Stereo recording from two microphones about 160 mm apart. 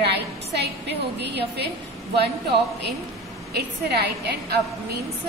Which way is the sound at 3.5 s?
90° right.